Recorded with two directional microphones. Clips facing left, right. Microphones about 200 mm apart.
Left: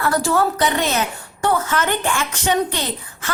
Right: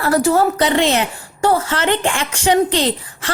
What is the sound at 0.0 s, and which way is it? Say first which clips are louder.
A woman's voice: right 4 dB; 25° right (ahead or behind).